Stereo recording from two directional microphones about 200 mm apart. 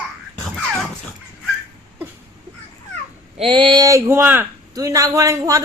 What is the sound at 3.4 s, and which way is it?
Speech, 25° right (ahead or behind).